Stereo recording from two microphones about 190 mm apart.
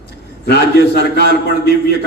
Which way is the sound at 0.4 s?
60° left (ahead or behind).